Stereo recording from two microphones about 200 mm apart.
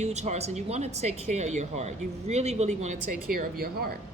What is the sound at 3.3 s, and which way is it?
Speech, 50° right (ahead or behind).